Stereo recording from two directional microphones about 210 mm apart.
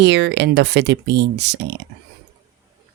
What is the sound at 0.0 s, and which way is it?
Speech, 55° right (ahead or behind).